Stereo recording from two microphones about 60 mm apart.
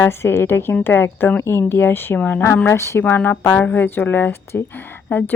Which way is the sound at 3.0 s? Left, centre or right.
Left.